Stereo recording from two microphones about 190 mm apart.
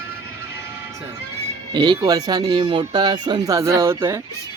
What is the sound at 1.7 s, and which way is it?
Speech, 25° right (ahead or behind).